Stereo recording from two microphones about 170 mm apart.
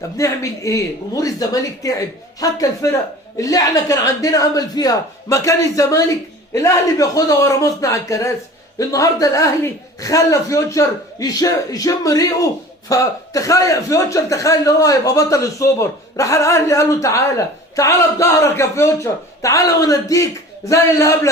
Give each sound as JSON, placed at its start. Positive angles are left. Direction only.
{"t": 0.2, "sound": "a man's voice", "side_deg": 20}